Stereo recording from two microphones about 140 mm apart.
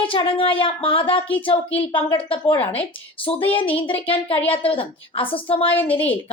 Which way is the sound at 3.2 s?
40° left (ahead or behind).